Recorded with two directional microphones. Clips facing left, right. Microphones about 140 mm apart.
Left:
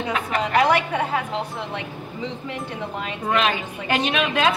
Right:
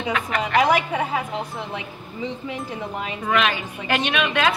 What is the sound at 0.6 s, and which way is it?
Speech, 5° right (ahead or behind).